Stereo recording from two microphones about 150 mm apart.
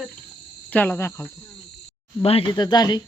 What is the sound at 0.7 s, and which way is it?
Speech, 10° left (ahead or behind).